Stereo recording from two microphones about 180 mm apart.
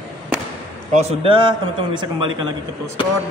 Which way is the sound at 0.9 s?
35° right (ahead or behind).